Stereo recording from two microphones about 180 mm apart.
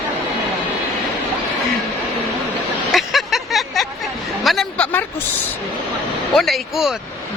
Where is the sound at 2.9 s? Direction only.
Centre (ahead or behind).